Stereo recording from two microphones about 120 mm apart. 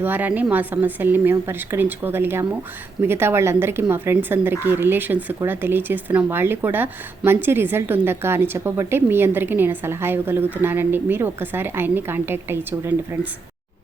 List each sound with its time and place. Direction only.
0.0 s a woman's voice: 15° right (ahead or behind)